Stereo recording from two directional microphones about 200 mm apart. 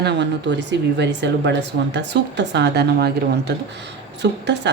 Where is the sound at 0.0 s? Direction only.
60° right (ahead or behind).